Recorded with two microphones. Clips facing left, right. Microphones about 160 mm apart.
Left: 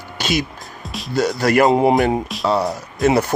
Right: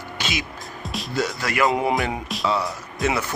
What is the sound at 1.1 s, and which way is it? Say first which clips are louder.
Speech: left 9 dB; 40° left (ahead or behind).